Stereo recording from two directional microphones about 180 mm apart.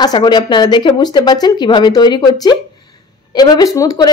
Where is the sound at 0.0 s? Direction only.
25° left (ahead or behind).